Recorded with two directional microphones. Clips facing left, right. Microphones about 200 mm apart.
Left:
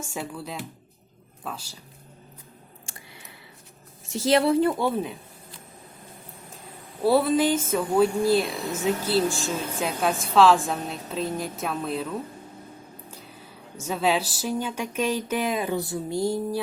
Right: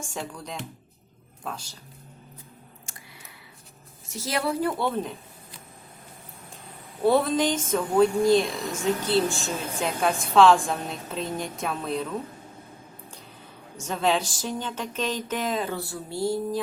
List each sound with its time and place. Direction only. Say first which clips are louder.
0.0 s a woman's voice: left 2 dB; 5° left (ahead or behind)
4.2 s a woman's voice: left 7 dB; 25° left (ahead or behind)
4.8 s speech: left 2 dB; 10° left (ahead or behind)
7.0 s a woman's voice: left 1 dB; 5° left (ahead or behind)
13.7 s speech: left 1 dB; 5° left (ahead or behind)